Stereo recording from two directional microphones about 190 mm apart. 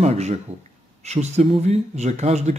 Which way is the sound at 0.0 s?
35° right (ahead or behind).